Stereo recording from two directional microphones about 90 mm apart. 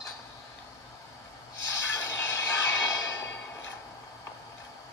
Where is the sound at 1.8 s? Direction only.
30° left (ahead or behind).